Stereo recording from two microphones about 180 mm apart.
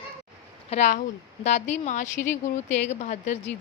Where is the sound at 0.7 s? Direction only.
40° left (ahead or behind).